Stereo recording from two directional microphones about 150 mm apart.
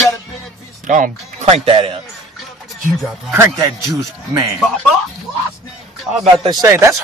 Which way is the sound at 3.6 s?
25° right (ahead or behind).